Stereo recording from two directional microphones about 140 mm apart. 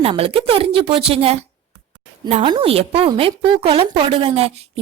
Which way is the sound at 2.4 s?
35° right (ahead or behind).